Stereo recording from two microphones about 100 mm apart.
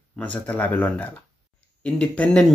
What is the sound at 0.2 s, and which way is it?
Speech, 15° left (ahead or behind).